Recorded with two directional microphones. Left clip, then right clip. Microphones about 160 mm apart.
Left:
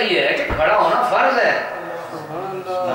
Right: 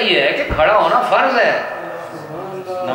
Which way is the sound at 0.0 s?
5° right (ahead or behind).